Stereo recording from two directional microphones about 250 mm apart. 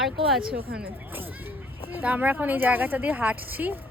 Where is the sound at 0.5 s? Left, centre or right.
Right.